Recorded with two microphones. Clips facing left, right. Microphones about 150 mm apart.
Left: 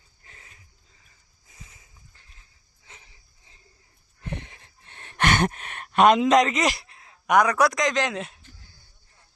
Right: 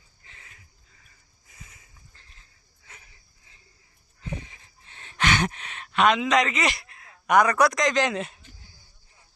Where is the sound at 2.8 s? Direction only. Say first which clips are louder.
Even; 20° left (ahead or behind).